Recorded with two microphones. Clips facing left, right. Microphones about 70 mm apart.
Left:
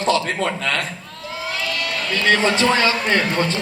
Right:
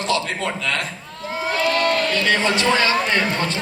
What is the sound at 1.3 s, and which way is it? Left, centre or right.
Crowd, right.